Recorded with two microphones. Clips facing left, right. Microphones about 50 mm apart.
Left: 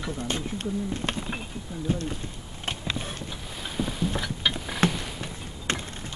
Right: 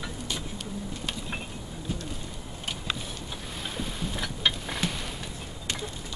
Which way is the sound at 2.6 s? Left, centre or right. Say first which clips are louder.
Left 3 dB; left.